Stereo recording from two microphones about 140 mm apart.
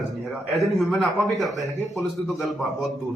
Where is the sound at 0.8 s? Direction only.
Centre (ahead or behind).